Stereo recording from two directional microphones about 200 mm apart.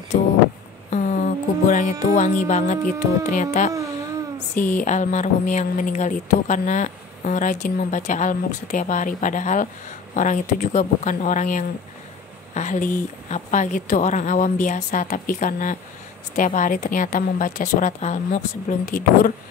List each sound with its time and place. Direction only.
0.1 s vehicle: 35° left (ahead or behind)
0.8 s speech: 40° left (ahead or behind)